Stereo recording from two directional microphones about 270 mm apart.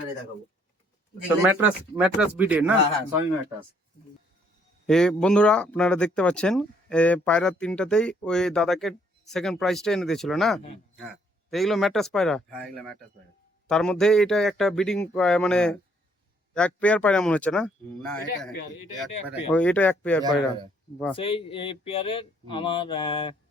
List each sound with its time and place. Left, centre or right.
1.4 s speech: centre
4.9 s speech: centre
19.5 s speech: centre
21.2 s a sound: centre